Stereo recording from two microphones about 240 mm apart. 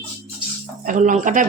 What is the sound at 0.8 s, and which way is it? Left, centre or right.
Speech, right.